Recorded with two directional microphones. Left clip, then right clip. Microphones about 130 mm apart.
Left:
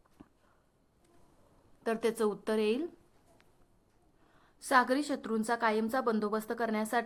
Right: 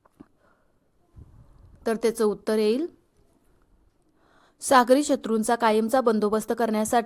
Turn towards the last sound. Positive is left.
turn(degrees=-40)  # may be behind; listen again after turning